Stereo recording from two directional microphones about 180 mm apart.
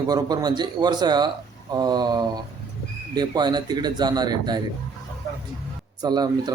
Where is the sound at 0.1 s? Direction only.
20° right (ahead or behind).